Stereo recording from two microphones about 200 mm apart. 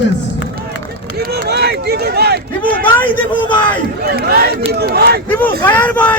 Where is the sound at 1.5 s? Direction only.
55° right (ahead or behind).